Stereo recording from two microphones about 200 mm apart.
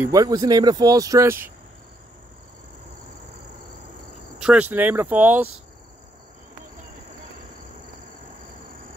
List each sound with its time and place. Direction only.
0.0 s speech: 15° right (ahead or behind)
4.4 s speech: 5° right (ahead or behind)